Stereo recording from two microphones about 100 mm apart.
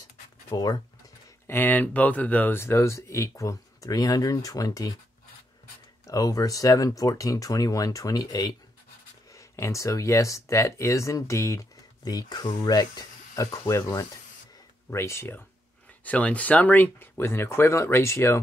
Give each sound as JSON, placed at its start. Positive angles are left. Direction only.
{"t": 0.6, "sound": "speech", "side_deg": 40}
{"t": 1.5, "sound": "speech", "side_deg": 20}
{"t": 6.0, "sound": "speech", "side_deg": 35}